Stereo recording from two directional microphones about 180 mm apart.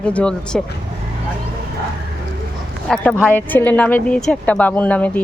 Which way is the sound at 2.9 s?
5° left (ahead or behind).